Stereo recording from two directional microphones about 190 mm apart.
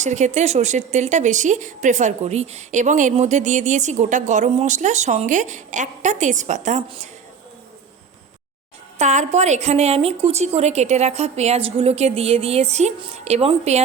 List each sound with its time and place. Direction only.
0.0 s speech: 40° right (ahead or behind)
6.8 s a woman's voice: 30° right (ahead or behind)
9.0 s speech: 35° right (ahead or behind)